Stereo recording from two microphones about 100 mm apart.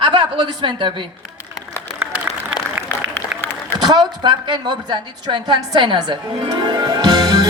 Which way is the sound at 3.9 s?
50° right (ahead or behind).